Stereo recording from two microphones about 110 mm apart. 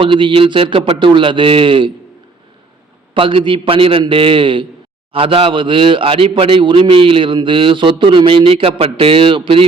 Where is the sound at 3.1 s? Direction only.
50° right (ahead or behind).